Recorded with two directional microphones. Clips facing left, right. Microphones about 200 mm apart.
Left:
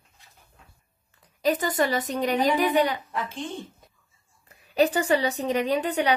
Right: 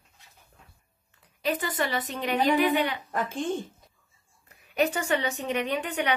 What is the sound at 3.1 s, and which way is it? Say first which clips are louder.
Speech: right 3 dB; 50° right (ahead or behind).